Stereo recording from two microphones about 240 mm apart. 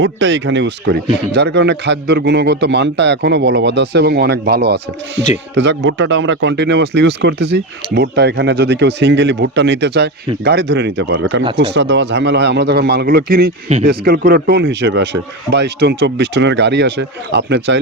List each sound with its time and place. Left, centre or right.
0.0 s speech: right